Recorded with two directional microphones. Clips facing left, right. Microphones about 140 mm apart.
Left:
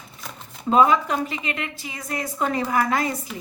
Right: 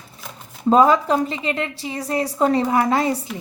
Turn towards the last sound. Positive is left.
turn(degrees=-30)  # may be behind; listen again after turning